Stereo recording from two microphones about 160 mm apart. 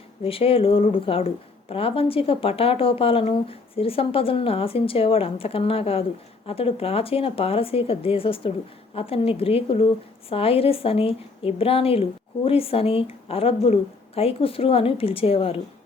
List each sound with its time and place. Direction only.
0.3 s speech: 35° left (ahead or behind)